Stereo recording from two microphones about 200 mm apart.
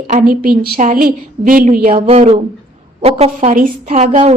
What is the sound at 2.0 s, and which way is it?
A woman's voice, 30° right (ahead or behind).